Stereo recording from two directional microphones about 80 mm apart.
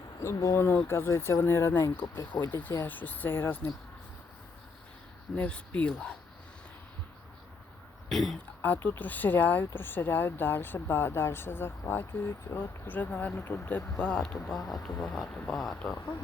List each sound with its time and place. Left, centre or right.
0.2 s speech: left
5.4 s speech: centre
8.1 s speech: centre
8.6 s speech: left
14.5 s speech: centre
15.8 s speech: left